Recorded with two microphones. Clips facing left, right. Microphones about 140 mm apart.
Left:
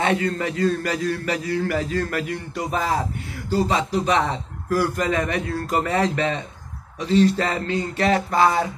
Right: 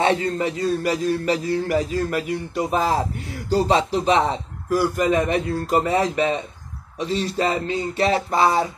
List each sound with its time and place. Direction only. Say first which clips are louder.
0.0 s a man's voice: right 2 dB; 25° right (ahead or behind)
3.5 s a man's voice: right 2 dB; 30° right (ahead or behind)